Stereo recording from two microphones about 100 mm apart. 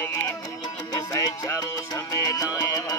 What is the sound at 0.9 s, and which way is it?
Music, 30° left (ahead or behind).